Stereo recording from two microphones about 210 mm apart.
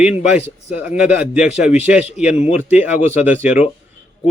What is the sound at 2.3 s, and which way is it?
Speech, 30° left (ahead or behind).